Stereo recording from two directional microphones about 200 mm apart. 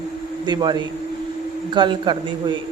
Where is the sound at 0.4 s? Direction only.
20° right (ahead or behind).